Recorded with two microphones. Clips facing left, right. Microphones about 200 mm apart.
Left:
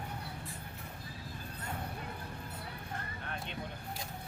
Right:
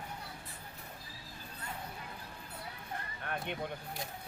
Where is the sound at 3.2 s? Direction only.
55° right (ahead or behind).